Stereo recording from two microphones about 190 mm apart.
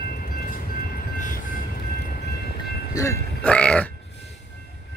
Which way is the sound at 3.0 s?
20° left (ahead or behind).